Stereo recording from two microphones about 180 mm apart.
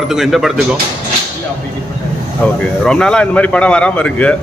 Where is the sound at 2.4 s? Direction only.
5° left (ahead or behind).